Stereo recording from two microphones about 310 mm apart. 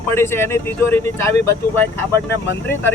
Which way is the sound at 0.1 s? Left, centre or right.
Centre.